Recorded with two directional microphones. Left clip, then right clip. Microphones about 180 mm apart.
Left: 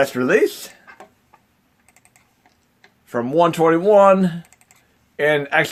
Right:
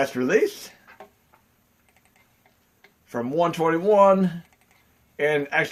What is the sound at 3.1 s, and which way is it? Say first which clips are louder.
Speech: left 7 dB; 45° left (ahead or behind).